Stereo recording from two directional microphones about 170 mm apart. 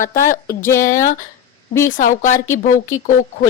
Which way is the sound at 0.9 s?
50° left (ahead or behind).